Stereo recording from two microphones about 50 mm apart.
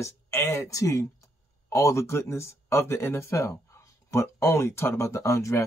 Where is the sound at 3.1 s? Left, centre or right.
Left.